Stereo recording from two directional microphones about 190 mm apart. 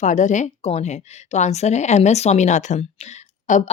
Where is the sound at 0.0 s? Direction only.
40° left (ahead or behind).